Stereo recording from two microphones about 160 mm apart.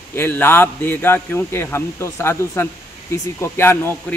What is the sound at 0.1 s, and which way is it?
Speech, 15° left (ahead or behind).